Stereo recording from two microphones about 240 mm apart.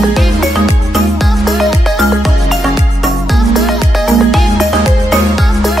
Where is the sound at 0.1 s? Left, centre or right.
Centre.